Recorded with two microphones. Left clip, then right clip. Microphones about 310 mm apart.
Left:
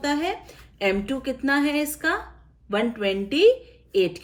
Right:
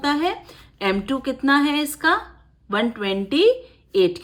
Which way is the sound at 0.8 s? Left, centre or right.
Centre.